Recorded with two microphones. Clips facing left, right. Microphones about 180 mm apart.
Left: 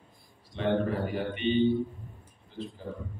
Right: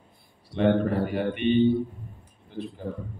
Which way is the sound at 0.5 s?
65° right (ahead or behind).